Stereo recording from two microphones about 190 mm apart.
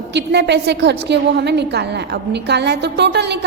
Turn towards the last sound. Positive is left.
turn(degrees=-60)  # may be behind; listen again after turning